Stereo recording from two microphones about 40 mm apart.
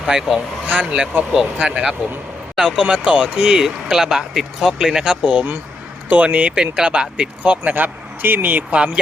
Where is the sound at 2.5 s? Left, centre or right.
Right.